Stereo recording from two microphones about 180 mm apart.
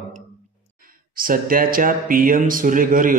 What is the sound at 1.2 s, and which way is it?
A man's voice, 50° right (ahead or behind).